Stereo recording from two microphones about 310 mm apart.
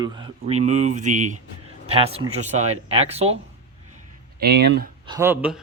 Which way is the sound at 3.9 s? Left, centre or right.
Right.